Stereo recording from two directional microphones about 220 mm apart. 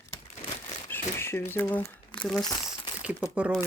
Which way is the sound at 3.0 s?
5° right (ahead or behind).